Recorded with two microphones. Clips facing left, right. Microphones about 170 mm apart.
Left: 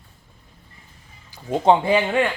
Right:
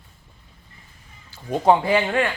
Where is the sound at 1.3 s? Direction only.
20° left (ahead or behind).